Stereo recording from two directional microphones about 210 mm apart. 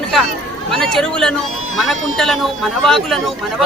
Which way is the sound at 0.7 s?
Centre (ahead or behind).